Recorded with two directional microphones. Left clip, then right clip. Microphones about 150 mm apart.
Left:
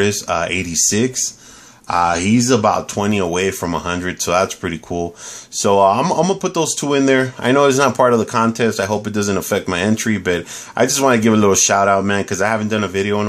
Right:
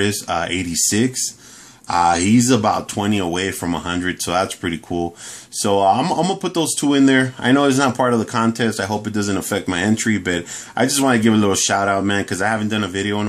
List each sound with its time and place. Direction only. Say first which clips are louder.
0.0 s speech: left 3 dB; 25° left (ahead or behind)